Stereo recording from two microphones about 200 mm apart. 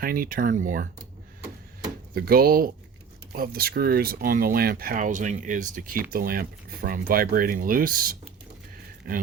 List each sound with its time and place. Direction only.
0.0 s speech: 45° right (ahead or behind)
2.1 s speech: 50° right (ahead or behind)